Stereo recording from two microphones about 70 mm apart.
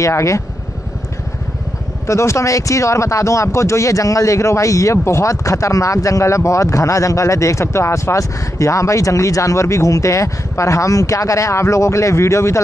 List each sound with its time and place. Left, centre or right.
0.0 s speech: left
2.0 s speech: left